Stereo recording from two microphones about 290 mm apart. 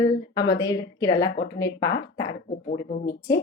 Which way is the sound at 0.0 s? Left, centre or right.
Centre.